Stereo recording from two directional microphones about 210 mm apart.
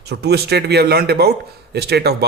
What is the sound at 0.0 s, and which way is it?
Speech, 50° right (ahead or behind).